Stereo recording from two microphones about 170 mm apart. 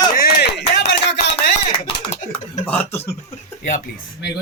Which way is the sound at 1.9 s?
35° left (ahead or behind).